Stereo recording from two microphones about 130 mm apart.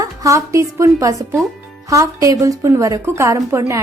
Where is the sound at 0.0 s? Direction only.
25° right (ahead or behind).